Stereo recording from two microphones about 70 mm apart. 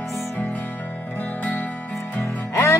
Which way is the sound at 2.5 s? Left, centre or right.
Left.